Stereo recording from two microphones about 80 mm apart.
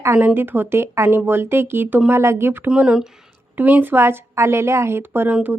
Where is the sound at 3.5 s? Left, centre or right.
Right.